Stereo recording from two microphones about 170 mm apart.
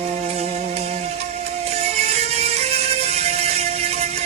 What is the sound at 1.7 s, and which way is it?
Music, 40° right (ahead or behind).